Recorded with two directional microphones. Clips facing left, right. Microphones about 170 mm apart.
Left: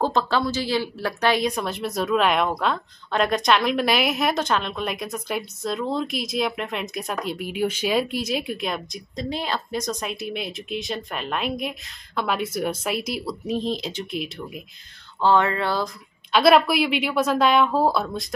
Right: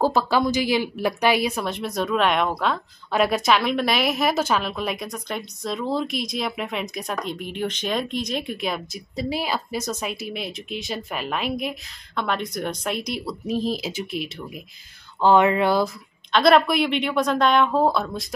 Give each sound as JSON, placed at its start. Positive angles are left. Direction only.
{"t": 0.0, "sound": "a woman's voice", "side_deg": -10}
{"t": 15.1, "sound": "a sound", "side_deg": -15}
{"t": 16.3, "sound": "a woman's voice", "side_deg": 5}